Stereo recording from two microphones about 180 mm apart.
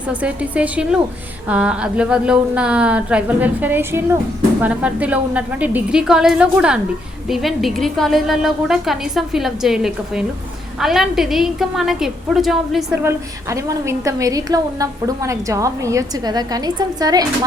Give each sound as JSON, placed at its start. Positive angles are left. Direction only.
{"t": 0.1, "sound": "a woman's voice", "side_deg": -5}
{"t": 13.0, "sound": "a woman's voice", "side_deg": -15}